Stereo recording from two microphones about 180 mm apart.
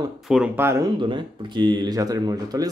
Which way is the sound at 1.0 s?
25° right (ahead or behind).